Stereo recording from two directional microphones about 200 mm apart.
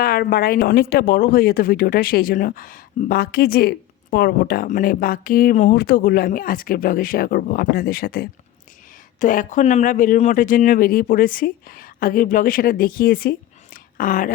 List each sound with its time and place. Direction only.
0.0 s speech: 50° left (ahead or behind)